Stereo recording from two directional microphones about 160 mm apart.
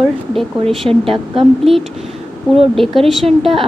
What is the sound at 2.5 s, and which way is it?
Speech, centre (ahead or behind).